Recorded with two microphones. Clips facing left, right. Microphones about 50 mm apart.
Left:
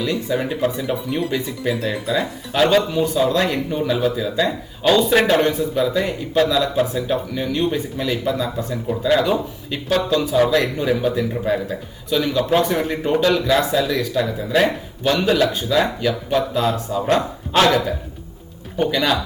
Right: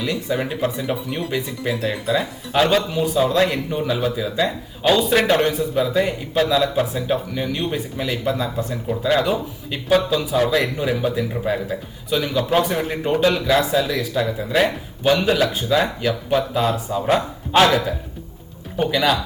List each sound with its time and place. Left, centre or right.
0.0 s a man's voice: centre